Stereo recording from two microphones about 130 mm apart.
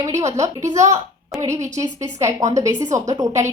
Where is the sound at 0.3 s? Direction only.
25° right (ahead or behind).